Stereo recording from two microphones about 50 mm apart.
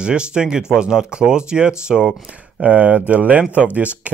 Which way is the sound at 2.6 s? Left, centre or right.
Right.